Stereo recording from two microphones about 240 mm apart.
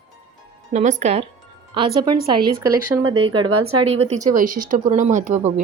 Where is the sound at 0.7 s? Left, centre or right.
Right.